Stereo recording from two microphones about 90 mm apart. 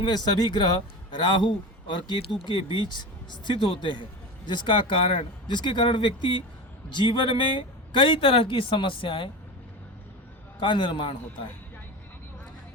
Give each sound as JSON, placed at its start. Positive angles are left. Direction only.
{"t": 0.3, "sound": "speech", "side_deg": 55}
{"t": 10.6, "sound": "speech", "side_deg": 65}